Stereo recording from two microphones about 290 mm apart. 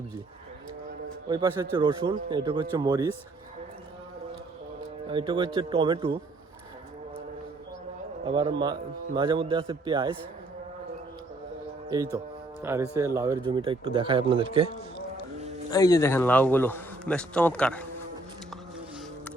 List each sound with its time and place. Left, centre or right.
1.3 s a man's voice: centre
5.0 s a man's voice: centre
8.2 s a man's voice: centre
12.6 s a man's voice: centre
15.7 s a man's voice: centre